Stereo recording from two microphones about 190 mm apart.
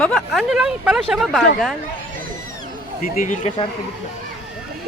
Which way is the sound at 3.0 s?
45° left (ahead or behind).